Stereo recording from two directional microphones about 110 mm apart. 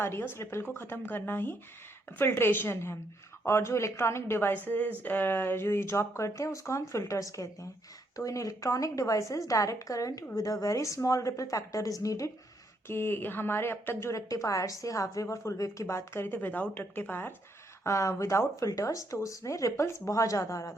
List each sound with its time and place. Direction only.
0.0 s a woman's voice: 20° left (ahead or behind)